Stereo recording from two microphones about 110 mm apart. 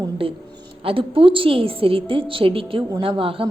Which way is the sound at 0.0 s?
55° right (ahead or behind).